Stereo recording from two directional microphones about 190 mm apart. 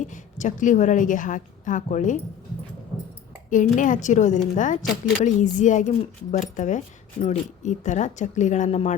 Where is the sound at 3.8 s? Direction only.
40° left (ahead or behind).